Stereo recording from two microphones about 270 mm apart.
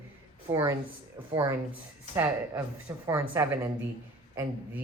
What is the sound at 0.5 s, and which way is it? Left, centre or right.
Speech, centre.